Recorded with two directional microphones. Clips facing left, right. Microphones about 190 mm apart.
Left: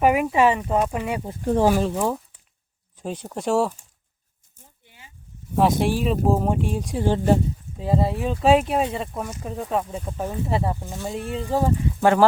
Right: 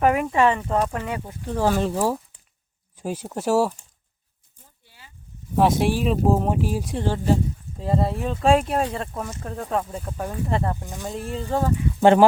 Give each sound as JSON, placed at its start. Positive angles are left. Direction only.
{"t": 0.0, "sound": "speech", "side_deg": 10}
{"t": 1.3, "sound": "speech", "side_deg": 30}
{"t": 1.8, "sound": "speech", "side_deg": -5}
{"t": 4.9, "sound": "a sound", "side_deg": 20}
{"t": 5.5, "sound": "speech", "side_deg": 0}
{"t": 11.1, "sound": "speech", "side_deg": 0}
{"t": 11.4, "sound": "speech", "side_deg": 15}
{"t": 11.9, "sound": "speech", "side_deg": -25}